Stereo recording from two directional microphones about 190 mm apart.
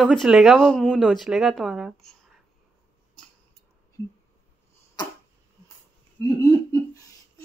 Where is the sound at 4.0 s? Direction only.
15° left (ahead or behind).